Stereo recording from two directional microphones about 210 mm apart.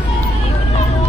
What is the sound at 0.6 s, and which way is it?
Vehicle, 30° left (ahead or behind).